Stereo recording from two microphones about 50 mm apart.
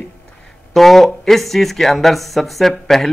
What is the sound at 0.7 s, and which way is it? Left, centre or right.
Speech, centre.